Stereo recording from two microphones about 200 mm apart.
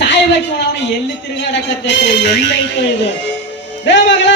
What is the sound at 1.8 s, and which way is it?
Speech, 60° left (ahead or behind).